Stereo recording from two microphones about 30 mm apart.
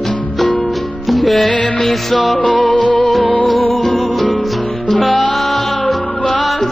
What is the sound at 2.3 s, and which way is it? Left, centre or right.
Music, left.